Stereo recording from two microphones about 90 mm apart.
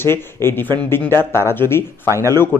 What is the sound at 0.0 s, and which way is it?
Speech, 25° left (ahead or behind).